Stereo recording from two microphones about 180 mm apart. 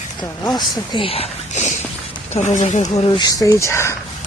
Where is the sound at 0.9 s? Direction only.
30° left (ahead or behind).